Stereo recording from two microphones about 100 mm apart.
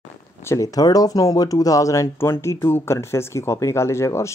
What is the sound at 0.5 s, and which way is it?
Speech, 35° left (ahead or behind).